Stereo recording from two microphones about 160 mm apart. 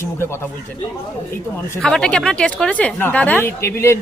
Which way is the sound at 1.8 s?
5° left (ahead or behind).